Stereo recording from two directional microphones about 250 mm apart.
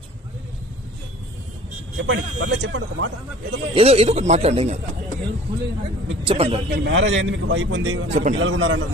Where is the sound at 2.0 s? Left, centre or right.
Right.